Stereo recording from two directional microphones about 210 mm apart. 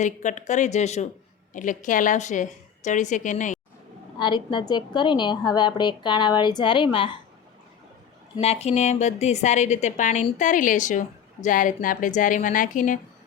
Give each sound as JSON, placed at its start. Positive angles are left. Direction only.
{"t": 0.0, "sound": "a woman's voice", "side_deg": 35}
{"t": 4.2, "sound": "a woman's voice", "side_deg": 20}
{"t": 8.4, "sound": "a woman's voice", "side_deg": 30}